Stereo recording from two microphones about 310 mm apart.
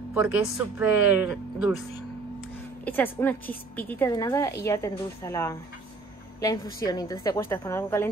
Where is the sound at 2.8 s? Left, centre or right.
Centre.